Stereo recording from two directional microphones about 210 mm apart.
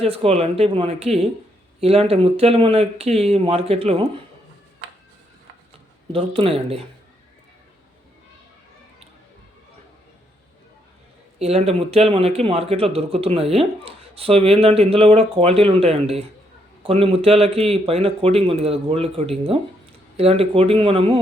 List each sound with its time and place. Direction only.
0.0 s speech: 30° right (ahead or behind)
6.1 s speech: 25° right (ahead or behind)
11.3 s speech: 30° right (ahead or behind)